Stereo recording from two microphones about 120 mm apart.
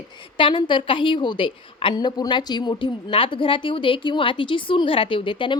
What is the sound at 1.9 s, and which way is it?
A woman's voice, 35° left (ahead or behind).